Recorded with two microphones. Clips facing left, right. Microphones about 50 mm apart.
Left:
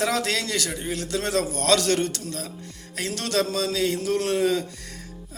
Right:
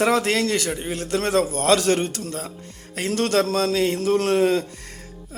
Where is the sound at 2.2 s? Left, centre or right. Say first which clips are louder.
Right 2 dB; right.